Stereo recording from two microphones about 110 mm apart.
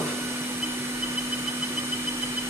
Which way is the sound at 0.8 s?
25° right (ahead or behind).